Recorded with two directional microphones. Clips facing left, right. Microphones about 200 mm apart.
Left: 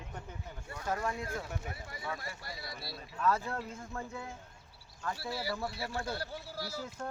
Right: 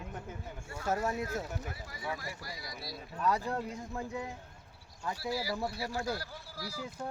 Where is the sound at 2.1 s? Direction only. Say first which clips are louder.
Right 1 dB; 25° left (ahead or behind).